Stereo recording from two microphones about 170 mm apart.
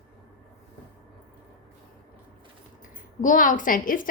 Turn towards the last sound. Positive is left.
turn(degrees=55)  # may be behind; listen again after turning